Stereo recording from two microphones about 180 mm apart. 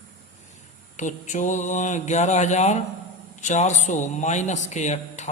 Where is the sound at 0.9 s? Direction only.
45° left (ahead or behind).